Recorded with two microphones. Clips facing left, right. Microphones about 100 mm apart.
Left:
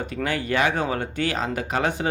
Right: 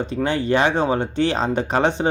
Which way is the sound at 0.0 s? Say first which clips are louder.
Right 5 dB; 25° right (ahead or behind).